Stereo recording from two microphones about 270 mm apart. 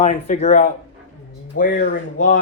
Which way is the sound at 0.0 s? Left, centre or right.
Left.